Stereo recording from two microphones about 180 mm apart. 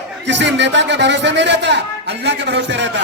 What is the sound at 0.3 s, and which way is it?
A man's voice, 80° right.